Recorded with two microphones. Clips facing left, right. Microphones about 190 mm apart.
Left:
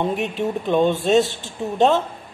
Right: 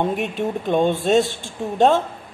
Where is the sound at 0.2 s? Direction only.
45° right (ahead or behind).